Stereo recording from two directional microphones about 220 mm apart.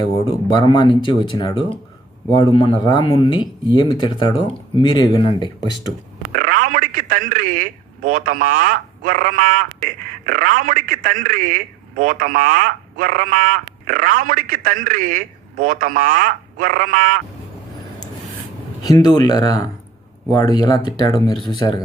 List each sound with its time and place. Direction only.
0.3 s speech: 20° left (ahead or behind)
6.4 s a man's voice: 40° right (ahead or behind)
18.8 s speech: 20° left (ahead or behind)